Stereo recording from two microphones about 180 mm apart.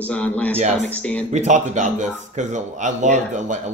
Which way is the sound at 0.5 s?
40° right (ahead or behind).